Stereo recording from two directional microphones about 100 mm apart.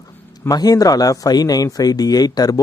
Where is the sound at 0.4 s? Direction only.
40° left (ahead or behind).